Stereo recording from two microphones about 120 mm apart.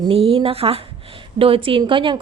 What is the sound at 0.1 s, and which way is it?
A woman's voice, 50° right (ahead or behind).